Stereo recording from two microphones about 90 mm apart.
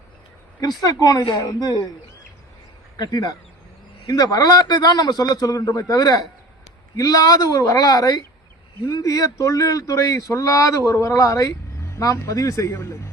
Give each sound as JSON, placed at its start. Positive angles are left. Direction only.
{"t": 0.8, "sound": "a man's voice", "side_deg": 45}
{"t": 3.0, "sound": "a man's voice", "side_deg": 45}